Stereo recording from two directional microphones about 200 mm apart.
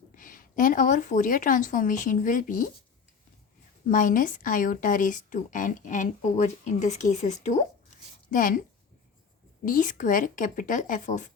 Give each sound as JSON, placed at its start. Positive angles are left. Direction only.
{"t": 0.2, "sound": "a woman's voice", "side_deg": 40}
{"t": 3.8, "sound": "a woman's voice", "side_deg": 40}
{"t": 9.6, "sound": "a woman's voice", "side_deg": 40}